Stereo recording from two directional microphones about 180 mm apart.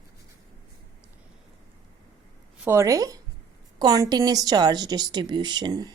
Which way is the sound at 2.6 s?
15° right (ahead or behind).